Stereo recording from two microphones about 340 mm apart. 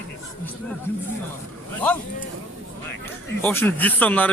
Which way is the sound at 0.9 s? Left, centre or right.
Centre.